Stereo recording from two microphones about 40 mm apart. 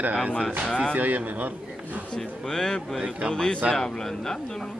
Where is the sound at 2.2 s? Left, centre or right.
Centre.